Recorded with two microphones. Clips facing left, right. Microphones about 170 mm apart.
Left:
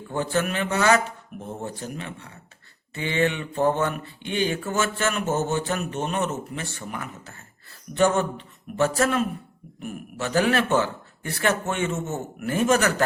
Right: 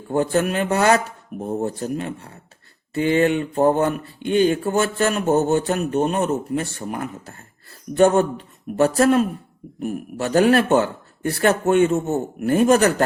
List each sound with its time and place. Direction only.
0.1 s speech: 40° right (ahead or behind)